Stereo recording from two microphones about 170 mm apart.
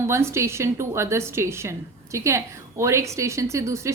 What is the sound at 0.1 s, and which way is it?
A woman's voice, 15° right (ahead or behind).